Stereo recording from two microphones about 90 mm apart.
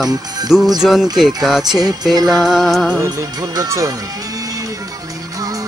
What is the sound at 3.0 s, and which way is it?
Speech, 40° right (ahead or behind).